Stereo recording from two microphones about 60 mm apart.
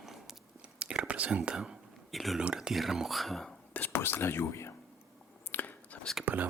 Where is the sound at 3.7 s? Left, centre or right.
Left.